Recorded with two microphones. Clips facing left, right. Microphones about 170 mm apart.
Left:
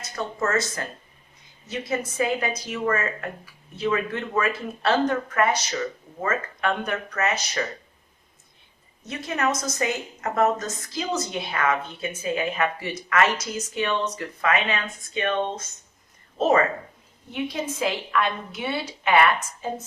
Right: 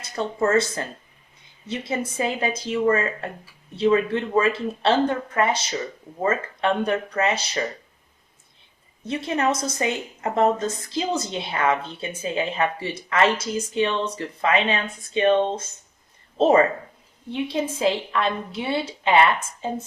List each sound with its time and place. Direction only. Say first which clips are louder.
0.0 s a woman's voice: right 4 dB; 30° right (ahead or behind)
9.0 s a woman's voice: right 3 dB; 30° right (ahead or behind)